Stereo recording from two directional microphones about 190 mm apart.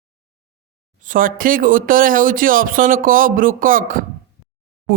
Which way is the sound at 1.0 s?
45° right (ahead or behind).